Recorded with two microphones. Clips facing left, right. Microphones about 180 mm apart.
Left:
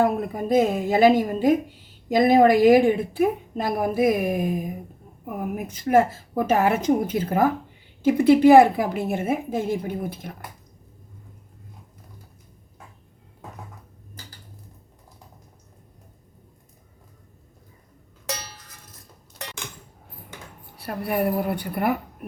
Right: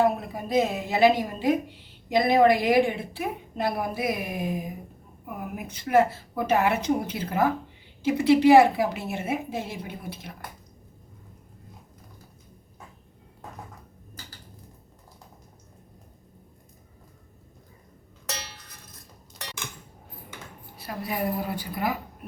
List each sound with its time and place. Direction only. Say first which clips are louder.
0.0 s speech: left 2 dB; 50° left (ahead or behind)
20.7 s a woman's voice: left 6 dB; 65° left (ahead or behind)